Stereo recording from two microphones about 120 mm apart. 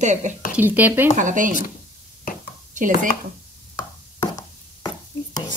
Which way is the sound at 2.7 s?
90° right.